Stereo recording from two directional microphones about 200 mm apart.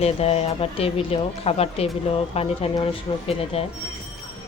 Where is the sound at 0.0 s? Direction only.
30° left (ahead or behind).